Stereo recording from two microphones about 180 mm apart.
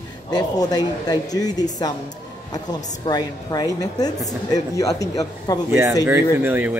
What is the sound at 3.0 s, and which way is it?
Speech, 20° left (ahead or behind).